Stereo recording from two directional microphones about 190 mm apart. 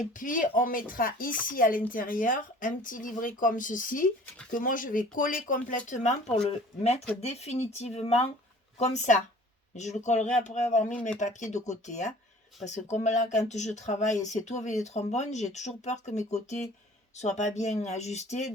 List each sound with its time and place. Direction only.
0.1 s speech: 45° left (ahead or behind)